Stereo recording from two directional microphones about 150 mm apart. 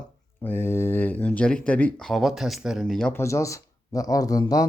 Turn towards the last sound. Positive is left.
turn(degrees=25)  # may be behind; listen again after turning